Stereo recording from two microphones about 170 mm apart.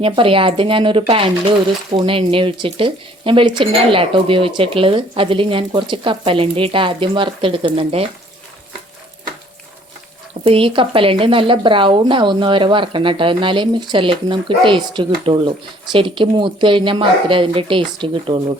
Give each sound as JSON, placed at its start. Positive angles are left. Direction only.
{"t": 0.0, "sound": "speech", "side_deg": -30}
{"t": 10.4, "sound": "speech", "side_deg": -30}